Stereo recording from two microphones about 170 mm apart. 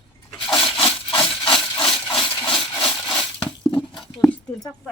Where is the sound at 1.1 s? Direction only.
30° left (ahead or behind).